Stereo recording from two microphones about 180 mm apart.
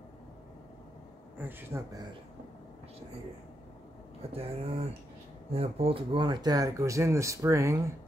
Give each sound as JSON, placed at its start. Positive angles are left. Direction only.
{"t": 1.4, "sound": "speech", "side_deg": -15}
{"t": 4.3, "sound": "speech", "side_deg": -35}